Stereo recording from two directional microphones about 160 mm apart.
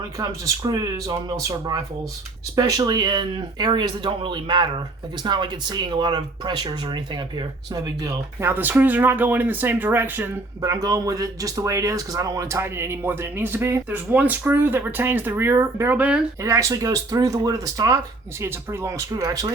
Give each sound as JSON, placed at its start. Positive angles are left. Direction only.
{"t": 0.2, "sound": "speech", "side_deg": -25}
{"t": 16.4, "sound": "speech", "side_deg": -20}